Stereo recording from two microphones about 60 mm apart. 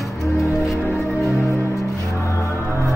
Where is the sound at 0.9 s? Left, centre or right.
Left.